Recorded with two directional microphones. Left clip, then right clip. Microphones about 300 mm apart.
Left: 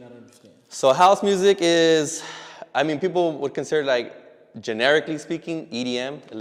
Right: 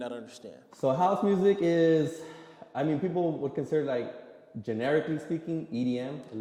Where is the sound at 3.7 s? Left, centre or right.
Centre.